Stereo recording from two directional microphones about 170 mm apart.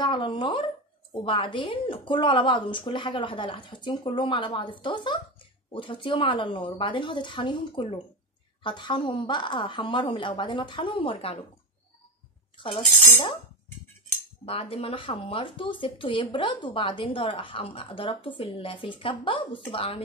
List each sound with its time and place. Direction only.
0.0 s a woman's voice: 30° left (ahead or behind)
12.5 s speech: 30° left (ahead or behind)
14.4 s speech: 35° left (ahead or behind)